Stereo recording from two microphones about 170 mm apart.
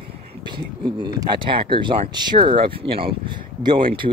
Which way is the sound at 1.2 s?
30° right (ahead or behind).